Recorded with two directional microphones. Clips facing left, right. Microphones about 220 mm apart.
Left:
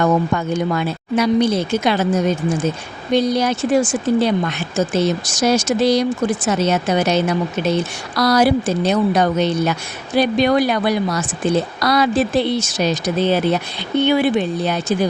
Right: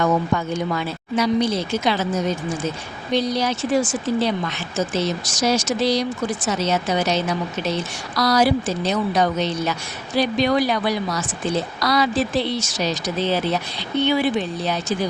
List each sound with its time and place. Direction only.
0.0 s a woman's voice: 50° left (ahead or behind)